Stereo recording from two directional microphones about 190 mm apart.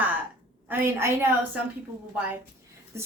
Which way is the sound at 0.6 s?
10° right (ahead or behind).